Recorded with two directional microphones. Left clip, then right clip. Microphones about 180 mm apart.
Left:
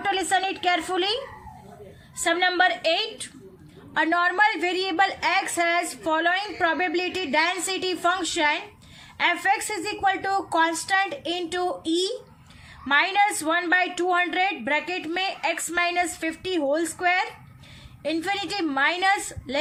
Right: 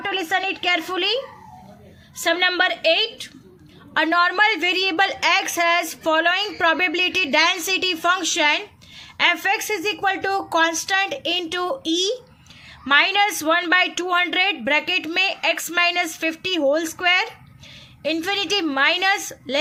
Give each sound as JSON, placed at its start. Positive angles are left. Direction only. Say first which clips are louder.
{"t": 0.0, "sound": "a woman's voice", "louder": "right 1 dB", "side_deg": -15}
{"t": 2.2, "sound": "a woman's voice", "louder": "right 2 dB", "side_deg": -25}